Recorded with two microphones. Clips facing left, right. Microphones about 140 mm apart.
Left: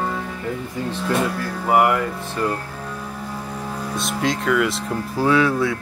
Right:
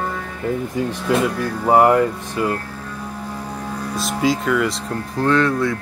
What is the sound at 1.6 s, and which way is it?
Speech, 30° right (ahead or behind).